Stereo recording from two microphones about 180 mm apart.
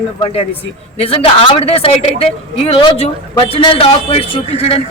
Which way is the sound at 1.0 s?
35° left (ahead or behind).